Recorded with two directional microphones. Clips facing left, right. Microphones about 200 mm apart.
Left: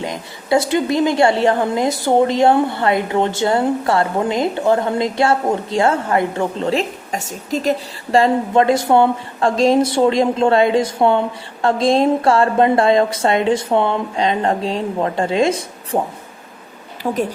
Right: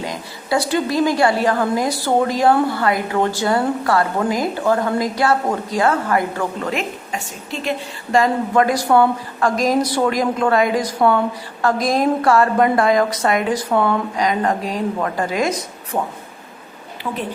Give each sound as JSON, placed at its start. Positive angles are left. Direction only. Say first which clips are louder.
{"t": 0.0, "sound": "a woman's voice", "louder": "left 2 dB", "side_deg": 20}
{"t": 17.0, "sound": "a woman's voice", "louder": "left 5 dB", "side_deg": 45}